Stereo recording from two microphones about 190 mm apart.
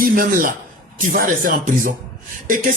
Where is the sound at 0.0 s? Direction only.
45° right (ahead or behind).